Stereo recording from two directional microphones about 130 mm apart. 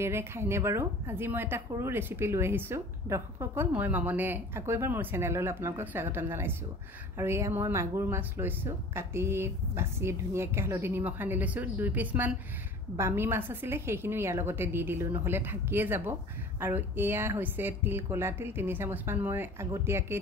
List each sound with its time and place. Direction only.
0.0 s a woman's voice: 20° right (ahead or behind)